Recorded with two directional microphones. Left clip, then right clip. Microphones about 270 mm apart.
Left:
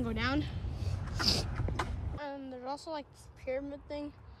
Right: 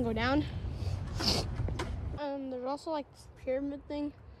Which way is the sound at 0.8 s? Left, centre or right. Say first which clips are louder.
Left 1 dB; centre.